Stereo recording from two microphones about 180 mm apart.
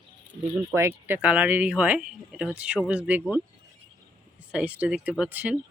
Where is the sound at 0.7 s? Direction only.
15° right (ahead or behind).